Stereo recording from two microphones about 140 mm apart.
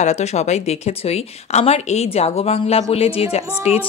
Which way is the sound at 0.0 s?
55° left (ahead or behind).